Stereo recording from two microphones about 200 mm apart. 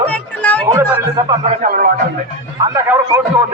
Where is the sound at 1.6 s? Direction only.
45° right (ahead or behind).